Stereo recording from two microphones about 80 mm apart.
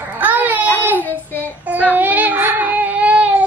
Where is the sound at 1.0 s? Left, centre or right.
Left.